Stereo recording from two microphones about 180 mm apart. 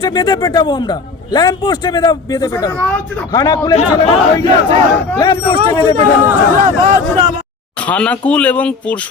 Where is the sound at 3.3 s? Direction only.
20° left (ahead or behind).